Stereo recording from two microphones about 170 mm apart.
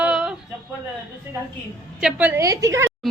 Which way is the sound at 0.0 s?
5° right (ahead or behind).